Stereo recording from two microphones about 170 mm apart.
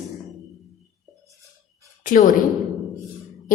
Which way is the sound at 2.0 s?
50° left (ahead or behind).